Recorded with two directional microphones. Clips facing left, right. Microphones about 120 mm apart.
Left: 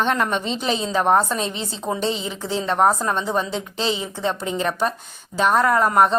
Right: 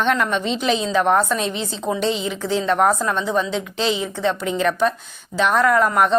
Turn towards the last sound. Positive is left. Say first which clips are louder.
# even
turn(degrees=35)  # may be behind; listen again after turning